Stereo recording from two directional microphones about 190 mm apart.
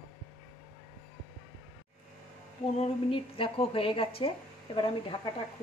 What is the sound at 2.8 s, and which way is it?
A woman's voice, 30° left (ahead or behind).